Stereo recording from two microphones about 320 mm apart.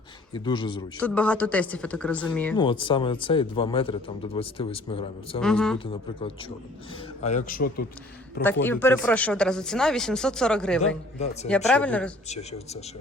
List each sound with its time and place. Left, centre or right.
0.3 s a man's voice: centre
2.6 s a man's voice: centre
5.4 s speech: centre
5.8 s a man's voice: centre
8.6 s speech: centre
12.3 s a man's voice: centre